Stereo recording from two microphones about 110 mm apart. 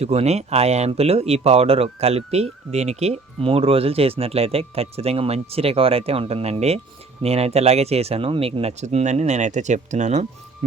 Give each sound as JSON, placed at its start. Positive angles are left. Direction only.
{"t": 0.0, "sound": "speech", "side_deg": -75}